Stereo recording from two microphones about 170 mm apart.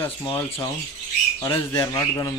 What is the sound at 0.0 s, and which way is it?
A man's voice, 15° left (ahead or behind).